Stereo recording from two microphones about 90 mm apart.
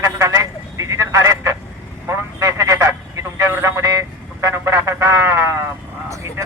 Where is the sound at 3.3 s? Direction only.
30° right (ahead or behind).